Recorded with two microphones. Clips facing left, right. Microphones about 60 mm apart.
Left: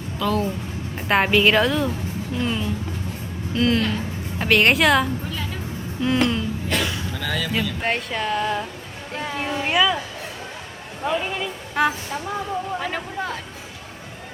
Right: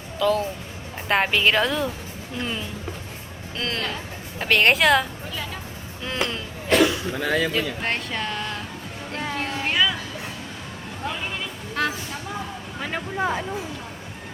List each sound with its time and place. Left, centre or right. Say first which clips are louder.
0.2 s a woman's voice: right 1 dB; centre
7.2 s speech: right 5 dB; right
7.8 s a woman's voice: left 3 dB; centre
11.0 s speech: left 6 dB; centre
13.1 s speech: right 4 dB; centre